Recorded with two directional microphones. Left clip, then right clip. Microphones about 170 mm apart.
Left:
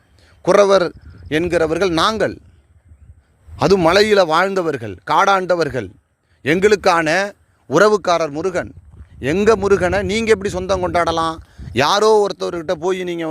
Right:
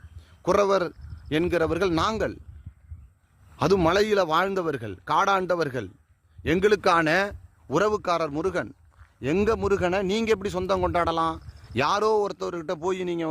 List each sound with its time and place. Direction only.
0.4 s a man's voice: 25° left (ahead or behind)
2.0 s speech: 30° left (ahead or behind)
3.6 s speech: 25° left (ahead or behind)
10.7 s speech: 10° left (ahead or behind)
10.9 s speech: 20° left (ahead or behind)